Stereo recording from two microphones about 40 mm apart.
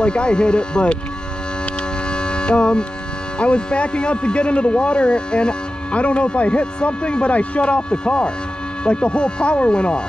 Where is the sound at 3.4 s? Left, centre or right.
Left.